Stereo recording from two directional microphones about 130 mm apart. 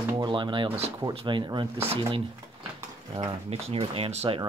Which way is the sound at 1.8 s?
50° right (ahead or behind).